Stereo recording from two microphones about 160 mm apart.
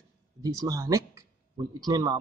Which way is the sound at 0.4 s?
20° right (ahead or behind).